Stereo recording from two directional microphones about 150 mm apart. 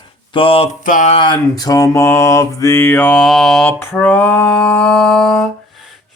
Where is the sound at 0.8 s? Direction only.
55° left (ahead or behind).